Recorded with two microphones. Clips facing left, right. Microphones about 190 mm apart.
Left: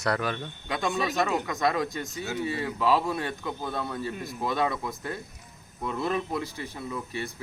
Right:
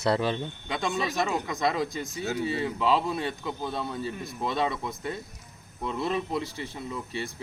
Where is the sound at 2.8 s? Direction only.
Centre (ahead or behind).